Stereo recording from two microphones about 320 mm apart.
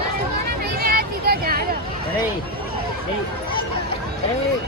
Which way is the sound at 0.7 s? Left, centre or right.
Right.